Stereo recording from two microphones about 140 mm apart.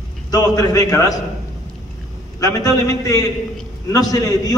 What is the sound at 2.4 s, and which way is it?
A man's voice, 25° left (ahead or behind).